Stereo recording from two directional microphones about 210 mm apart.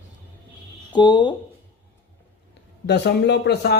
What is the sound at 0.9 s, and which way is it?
Speech, 20° left (ahead or behind).